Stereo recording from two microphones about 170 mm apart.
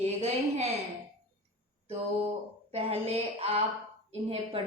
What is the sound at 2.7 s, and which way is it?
A woman's voice, 35° right (ahead or behind).